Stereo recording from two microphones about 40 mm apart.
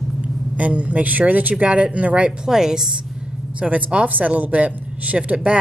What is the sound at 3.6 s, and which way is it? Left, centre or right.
Speech, right.